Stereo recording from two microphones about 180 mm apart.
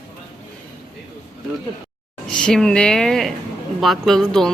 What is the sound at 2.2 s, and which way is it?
Speech, 5° left (ahead or behind).